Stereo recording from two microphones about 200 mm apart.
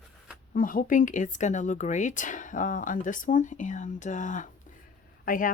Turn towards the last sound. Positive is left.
turn(degrees=45)  # may be behind; listen again after turning